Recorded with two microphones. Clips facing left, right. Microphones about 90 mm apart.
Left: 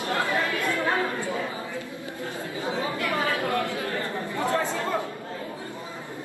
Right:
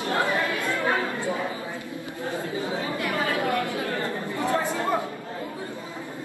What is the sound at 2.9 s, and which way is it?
Chatter, 25° right (ahead or behind).